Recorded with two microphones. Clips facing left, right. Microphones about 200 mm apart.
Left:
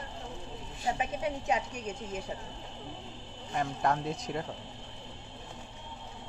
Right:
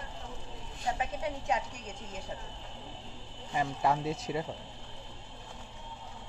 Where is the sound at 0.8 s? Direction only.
15° left (ahead or behind).